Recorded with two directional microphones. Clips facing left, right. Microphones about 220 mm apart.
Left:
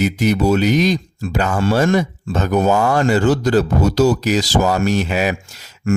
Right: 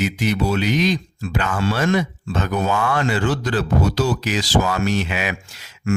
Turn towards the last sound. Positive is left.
turn(degrees=40)  # may be behind; listen again after turning